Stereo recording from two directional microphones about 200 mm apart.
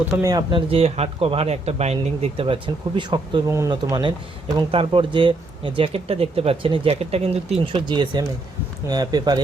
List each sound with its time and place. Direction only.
0.1 s speech: 15° right (ahead or behind)